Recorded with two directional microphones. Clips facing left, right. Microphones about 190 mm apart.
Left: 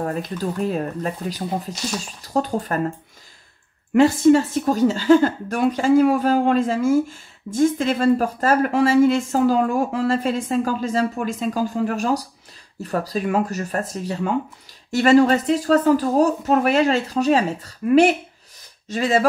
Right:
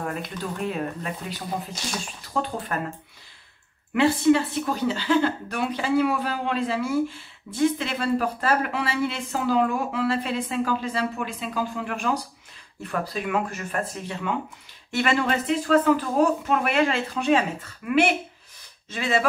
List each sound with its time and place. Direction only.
0.0 s speech: 35° left (ahead or behind)
3.9 s a woman's voice: 45° left (ahead or behind)